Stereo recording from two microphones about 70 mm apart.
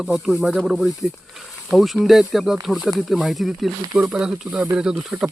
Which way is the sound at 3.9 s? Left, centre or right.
Centre.